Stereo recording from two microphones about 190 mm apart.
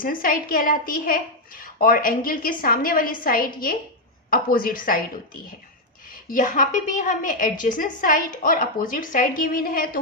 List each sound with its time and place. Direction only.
0.0 s a woman's voice: 45° left (ahead or behind)